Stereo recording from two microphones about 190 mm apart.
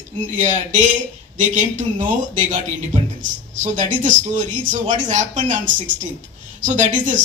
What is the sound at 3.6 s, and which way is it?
Speech, 40° right (ahead or behind).